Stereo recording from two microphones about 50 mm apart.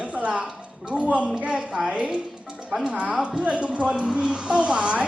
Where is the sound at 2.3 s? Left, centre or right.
Centre.